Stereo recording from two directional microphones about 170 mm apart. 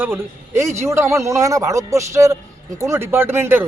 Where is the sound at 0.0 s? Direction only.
15° right (ahead or behind).